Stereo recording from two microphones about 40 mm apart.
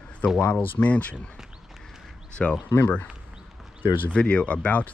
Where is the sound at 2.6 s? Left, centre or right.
Left.